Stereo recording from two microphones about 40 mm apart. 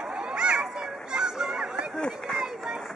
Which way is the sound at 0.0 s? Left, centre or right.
Right.